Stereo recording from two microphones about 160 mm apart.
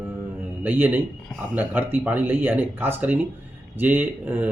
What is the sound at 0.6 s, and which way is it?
Speech, 10° right (ahead or behind).